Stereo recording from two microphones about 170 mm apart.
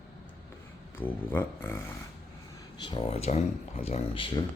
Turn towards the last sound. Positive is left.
turn(degrees=35)  # may be behind; listen again after turning